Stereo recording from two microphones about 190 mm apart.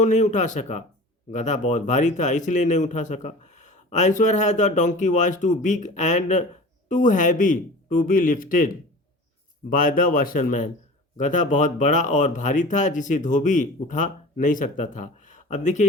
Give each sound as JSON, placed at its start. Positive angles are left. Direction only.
{"t": 0.0, "sound": "a man's voice", "side_deg": 40}